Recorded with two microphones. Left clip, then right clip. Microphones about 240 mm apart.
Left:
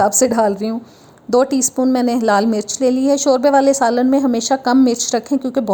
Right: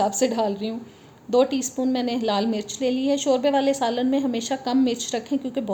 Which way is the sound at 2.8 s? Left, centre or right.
Left.